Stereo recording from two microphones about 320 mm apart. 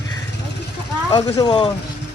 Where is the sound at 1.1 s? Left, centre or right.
Centre.